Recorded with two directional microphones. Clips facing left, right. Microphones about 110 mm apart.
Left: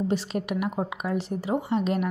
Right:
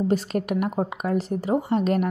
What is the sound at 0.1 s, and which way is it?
A woman's voice, 45° right (ahead or behind).